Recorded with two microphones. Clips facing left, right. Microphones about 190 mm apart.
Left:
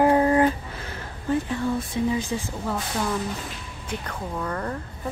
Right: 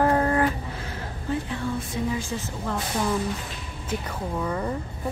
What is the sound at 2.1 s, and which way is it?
Speech, 15° left (ahead or behind).